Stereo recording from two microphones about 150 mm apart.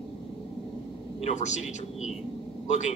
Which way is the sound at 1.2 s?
50° left (ahead or behind).